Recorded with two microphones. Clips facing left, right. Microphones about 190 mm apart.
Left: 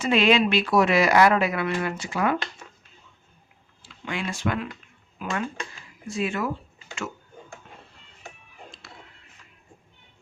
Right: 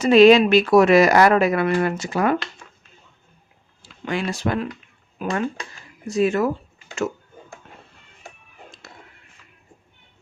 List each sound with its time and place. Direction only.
0.0 s speech: 40° right (ahead or behind)
3.8 s speech: 40° right (ahead or behind)